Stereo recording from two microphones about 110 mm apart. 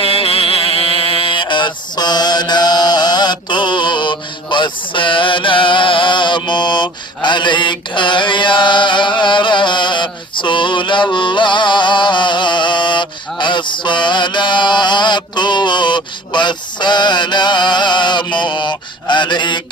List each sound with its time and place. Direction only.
0.0 s mantra: 60° left (ahead or behind)